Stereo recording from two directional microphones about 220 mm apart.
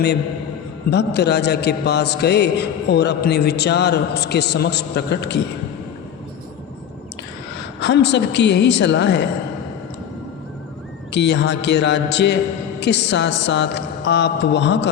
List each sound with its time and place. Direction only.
0.9 s a man's voice: 50° left (ahead or behind)
7.8 s a man's voice: 50° left (ahead or behind)
11.1 s a man's voice: 50° left (ahead or behind)